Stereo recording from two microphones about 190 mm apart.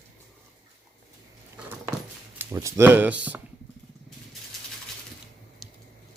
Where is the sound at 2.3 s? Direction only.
15° right (ahead or behind).